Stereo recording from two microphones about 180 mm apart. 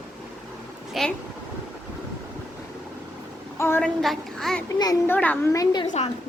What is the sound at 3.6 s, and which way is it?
A woman's voice, 10° left (ahead or behind).